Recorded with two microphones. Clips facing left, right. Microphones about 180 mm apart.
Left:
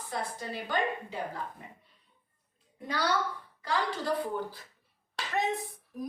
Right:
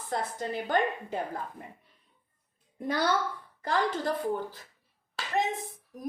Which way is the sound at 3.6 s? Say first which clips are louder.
Right 3 dB; 50° right (ahead or behind).